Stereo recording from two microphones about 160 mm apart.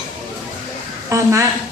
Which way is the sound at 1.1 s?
20° right (ahead or behind).